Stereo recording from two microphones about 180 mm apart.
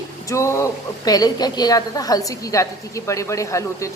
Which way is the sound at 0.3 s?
15° left (ahead or behind).